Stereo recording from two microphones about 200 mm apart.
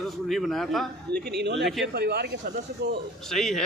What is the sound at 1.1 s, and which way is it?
Speech, 55° right (ahead or behind).